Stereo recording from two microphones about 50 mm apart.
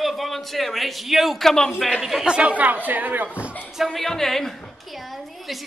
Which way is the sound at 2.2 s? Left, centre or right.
Right.